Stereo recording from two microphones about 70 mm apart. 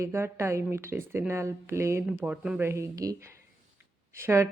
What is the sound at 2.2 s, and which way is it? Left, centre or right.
Speech, centre.